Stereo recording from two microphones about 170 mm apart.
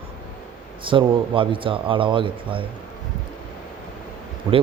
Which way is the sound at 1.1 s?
30° right (ahead or behind).